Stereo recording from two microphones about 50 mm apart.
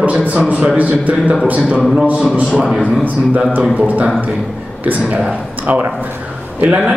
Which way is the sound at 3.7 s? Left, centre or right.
Right.